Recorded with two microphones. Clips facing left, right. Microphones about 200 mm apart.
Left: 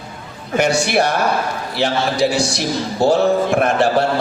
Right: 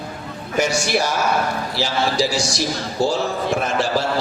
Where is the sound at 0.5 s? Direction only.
60° left (ahead or behind).